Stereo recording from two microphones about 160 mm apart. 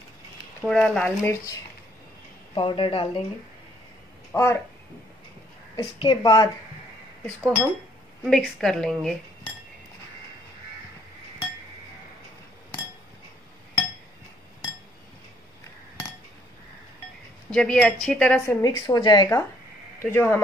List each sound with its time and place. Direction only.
0.7 s a woman's voice: 5° left (ahead or behind)
2.5 s speech: 30° left (ahead or behind)
4.3 s speech: 15° left (ahead or behind)
5.8 s speech: 30° left (ahead or behind)
8.2 s a woman's voice: centre (ahead or behind)
17.6 s a woman's voice: 5° left (ahead or behind)
18.6 s speech: 25° left (ahead or behind)